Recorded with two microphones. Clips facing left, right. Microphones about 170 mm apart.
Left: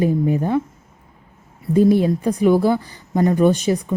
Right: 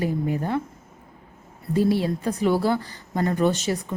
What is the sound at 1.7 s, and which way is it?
Speech, 20° left (ahead or behind).